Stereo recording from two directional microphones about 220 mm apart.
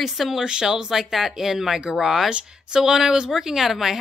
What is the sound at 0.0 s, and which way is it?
Speech, centre (ahead or behind).